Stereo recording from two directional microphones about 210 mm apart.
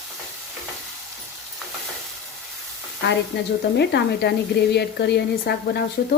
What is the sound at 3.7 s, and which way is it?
Speech, 55° left (ahead or behind).